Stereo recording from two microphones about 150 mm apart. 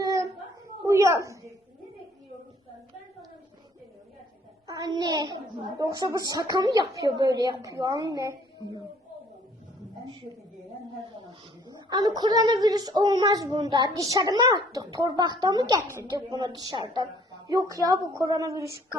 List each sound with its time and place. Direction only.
0.9 s a woman's voice: 20° right (ahead or behind)
4.6 s a woman's voice: 25° right (ahead or behind)
11.9 s a woman's voice: 30° right (ahead or behind)